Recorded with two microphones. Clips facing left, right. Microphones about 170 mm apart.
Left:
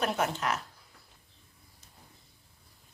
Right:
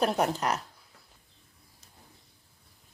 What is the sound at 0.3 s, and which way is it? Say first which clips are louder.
Speech: right 2 dB; 40° right (ahead or behind).